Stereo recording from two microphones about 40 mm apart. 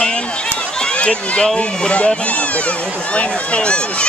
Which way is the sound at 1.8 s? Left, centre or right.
Left.